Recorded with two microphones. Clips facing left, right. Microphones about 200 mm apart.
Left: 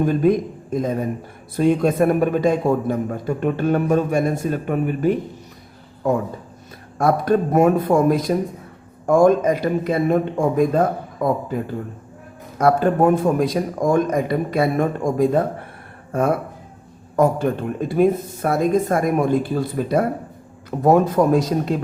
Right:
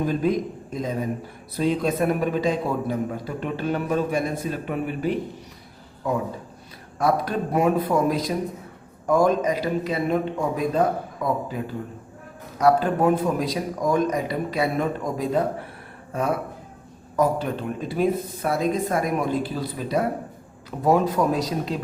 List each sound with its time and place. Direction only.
0.0 s a man's voice: 50° left (ahead or behind)
7.0 s a man's voice: 50° left (ahead or behind)
17.2 s a man's voice: 50° left (ahead or behind)